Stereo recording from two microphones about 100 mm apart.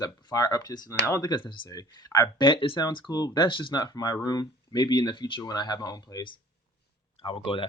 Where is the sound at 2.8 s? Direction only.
40° left (ahead or behind).